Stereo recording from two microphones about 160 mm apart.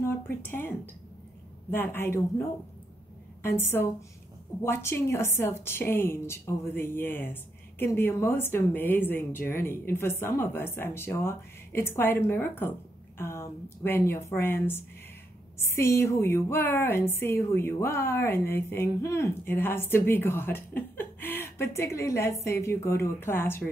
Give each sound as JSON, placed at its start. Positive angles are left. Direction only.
{"t": 0.0, "sound": "speech", "side_deg": 15}
{"t": 3.4, "sound": "speech", "side_deg": 15}